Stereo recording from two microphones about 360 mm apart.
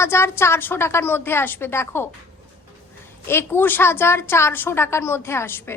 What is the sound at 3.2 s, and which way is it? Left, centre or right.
A woman's voice, centre.